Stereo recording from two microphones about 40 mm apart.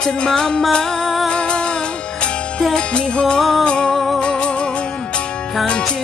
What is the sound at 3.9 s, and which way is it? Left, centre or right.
Music, centre.